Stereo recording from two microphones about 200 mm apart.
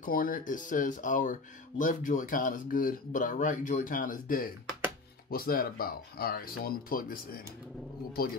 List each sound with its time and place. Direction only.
0.0 s speech: 45° left (ahead or behind)